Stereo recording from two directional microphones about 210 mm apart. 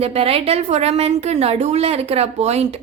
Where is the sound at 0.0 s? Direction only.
30° right (ahead or behind).